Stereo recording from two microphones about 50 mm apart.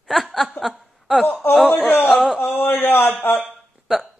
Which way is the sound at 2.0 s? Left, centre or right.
Centre.